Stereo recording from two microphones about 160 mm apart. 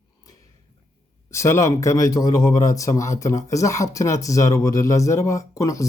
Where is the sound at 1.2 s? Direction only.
20° left (ahead or behind).